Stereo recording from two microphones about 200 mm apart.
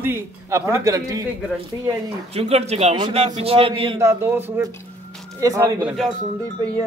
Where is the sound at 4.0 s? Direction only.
15° right (ahead or behind).